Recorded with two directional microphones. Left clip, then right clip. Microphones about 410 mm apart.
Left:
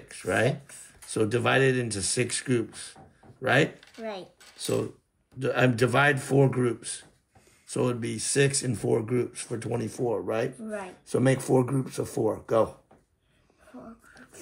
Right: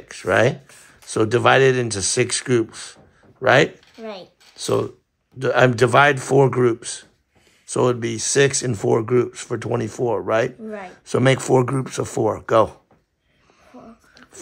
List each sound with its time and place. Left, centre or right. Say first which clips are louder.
0.1 s speech: right 9 dB; centre
4.1 s speech: right 3 dB; centre